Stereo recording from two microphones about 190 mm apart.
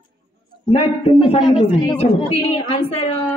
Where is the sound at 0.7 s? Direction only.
30° left (ahead or behind).